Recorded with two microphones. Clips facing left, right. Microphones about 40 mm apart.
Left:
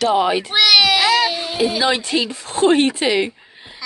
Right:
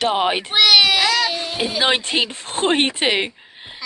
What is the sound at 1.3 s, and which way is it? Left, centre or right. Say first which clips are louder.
Speech: left 1 dB; centre.